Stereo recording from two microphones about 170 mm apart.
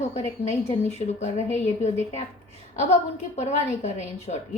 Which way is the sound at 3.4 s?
40° left (ahead or behind).